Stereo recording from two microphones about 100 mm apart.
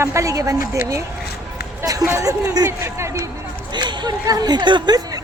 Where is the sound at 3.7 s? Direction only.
50° right (ahead or behind).